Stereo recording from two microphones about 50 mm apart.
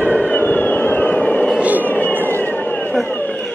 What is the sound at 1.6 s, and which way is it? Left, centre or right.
Vehicle, right.